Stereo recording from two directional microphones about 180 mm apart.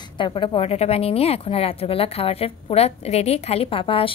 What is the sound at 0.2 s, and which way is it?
Speech, 25° left (ahead or behind).